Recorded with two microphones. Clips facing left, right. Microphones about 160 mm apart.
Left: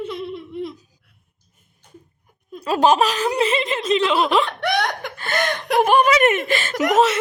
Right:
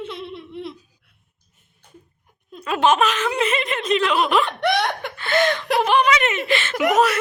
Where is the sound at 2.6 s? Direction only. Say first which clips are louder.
Left 2 dB; 35° left (ahead or behind).